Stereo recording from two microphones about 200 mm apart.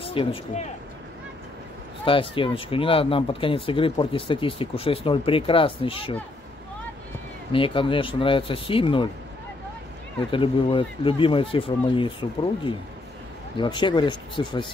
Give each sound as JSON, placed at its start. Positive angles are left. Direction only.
{"t": 0.0, "sound": "speech", "side_deg": 25}
{"t": 2.0, "sound": "speech", "side_deg": 25}
{"t": 7.5, "sound": "speech", "side_deg": 25}
{"t": 10.3, "sound": "speech", "side_deg": 25}